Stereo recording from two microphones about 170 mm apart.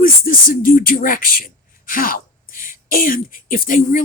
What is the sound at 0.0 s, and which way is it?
Speech, 60° left (ahead or behind).